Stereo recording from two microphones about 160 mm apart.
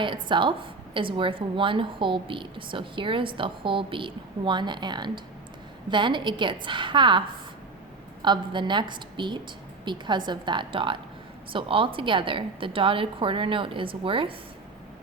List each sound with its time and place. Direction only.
0.0 s a woman's voice: 30° right (ahead or behind)